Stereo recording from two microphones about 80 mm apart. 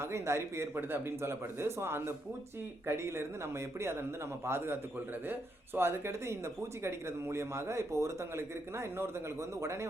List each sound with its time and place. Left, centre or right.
0.0 s a man's voice: right